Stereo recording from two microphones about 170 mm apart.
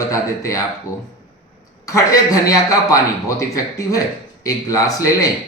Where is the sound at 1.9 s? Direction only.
20° left (ahead or behind).